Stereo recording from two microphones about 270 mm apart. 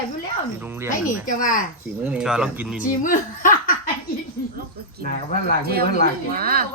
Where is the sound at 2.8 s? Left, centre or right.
Left.